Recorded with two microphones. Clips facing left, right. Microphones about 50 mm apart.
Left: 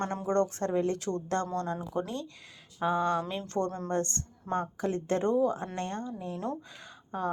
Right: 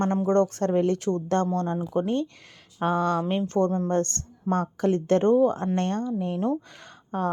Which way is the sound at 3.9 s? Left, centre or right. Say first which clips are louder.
Right 6 dB; right.